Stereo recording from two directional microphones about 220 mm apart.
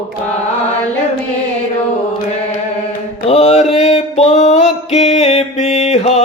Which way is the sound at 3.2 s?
25° left (ahead or behind).